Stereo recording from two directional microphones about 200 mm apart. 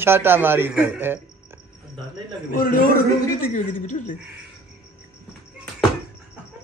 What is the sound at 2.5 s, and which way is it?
A woman's voice, 45° left (ahead or behind).